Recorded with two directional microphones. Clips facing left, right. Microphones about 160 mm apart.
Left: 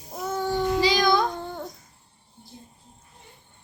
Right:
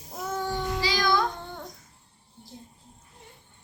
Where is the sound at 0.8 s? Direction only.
20° left (ahead or behind).